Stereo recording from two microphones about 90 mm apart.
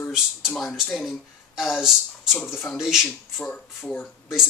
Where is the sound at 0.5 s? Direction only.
Centre (ahead or behind).